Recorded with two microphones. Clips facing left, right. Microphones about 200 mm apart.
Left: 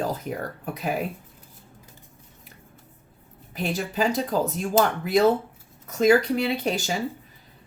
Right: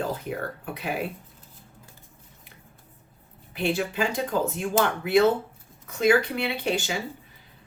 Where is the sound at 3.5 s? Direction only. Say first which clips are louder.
Even; 40° left (ahead or behind).